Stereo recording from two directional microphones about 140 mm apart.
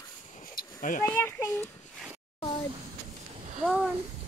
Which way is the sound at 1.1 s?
15° left (ahead or behind).